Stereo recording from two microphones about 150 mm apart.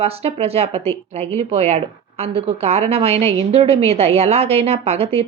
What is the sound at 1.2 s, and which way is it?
Speech, 20° left (ahead or behind).